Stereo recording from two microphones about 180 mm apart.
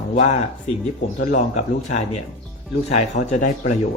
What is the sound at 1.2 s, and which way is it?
Speech, 45° left (ahead or behind).